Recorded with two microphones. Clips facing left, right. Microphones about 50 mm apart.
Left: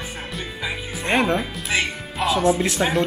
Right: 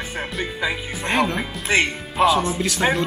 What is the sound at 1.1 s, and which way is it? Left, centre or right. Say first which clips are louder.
Speech: left 1 dB; centre.